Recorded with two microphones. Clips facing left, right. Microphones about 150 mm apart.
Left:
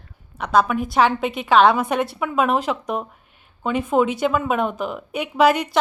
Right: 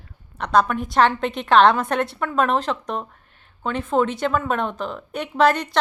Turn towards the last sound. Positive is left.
turn(degrees=10)  # may be behind; listen again after turning